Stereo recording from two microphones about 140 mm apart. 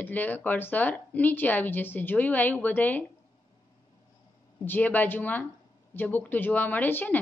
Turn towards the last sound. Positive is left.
turn(degrees=15)  # may be behind; listen again after turning